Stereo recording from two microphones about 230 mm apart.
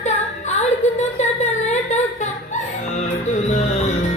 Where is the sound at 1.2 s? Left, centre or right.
Left.